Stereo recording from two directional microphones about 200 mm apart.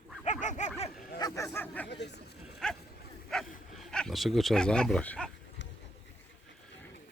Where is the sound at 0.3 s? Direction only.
35° left (ahead or behind).